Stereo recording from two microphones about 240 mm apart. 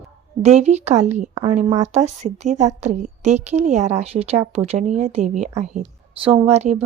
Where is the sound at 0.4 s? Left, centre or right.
Right.